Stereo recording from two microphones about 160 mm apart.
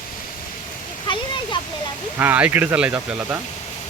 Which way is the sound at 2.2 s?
10° right (ahead or behind).